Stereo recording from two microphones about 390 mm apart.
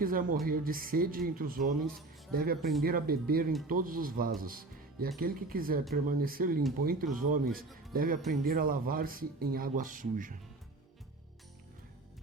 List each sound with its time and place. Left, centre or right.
0.0 s speech: right
2.6 s speech: centre
2.8 s speech: right
7.4 s speech: centre
7.9 s speech: right